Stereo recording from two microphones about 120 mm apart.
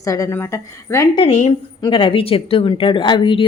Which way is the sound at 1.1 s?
60° left (ahead or behind).